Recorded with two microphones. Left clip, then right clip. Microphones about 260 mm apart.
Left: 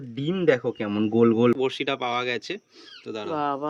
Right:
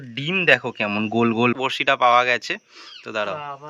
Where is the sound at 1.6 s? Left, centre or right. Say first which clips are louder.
Right 8 dB; centre.